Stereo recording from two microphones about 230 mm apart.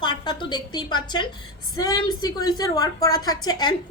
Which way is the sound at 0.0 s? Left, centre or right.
Centre.